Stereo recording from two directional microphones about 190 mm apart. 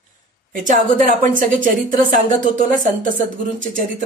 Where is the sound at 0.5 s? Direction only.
40° right (ahead or behind).